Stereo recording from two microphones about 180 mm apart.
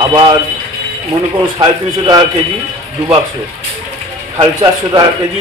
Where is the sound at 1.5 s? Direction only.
20° right (ahead or behind).